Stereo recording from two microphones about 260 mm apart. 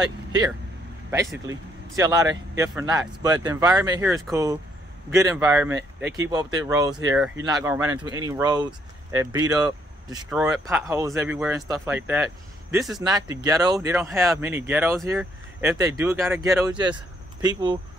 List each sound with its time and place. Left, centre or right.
1.1 s speech: centre
10.3 s speech: centre